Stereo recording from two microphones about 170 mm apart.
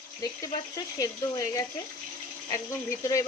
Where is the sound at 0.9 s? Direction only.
20° left (ahead or behind).